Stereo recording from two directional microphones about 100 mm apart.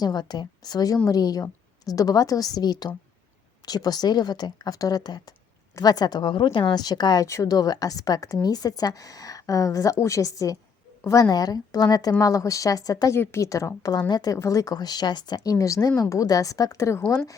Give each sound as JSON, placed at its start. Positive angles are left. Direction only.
{"t": 0.0, "sound": "a woman's voice", "side_deg": 45}